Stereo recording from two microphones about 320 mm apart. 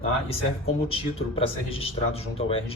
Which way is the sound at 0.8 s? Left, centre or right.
Centre.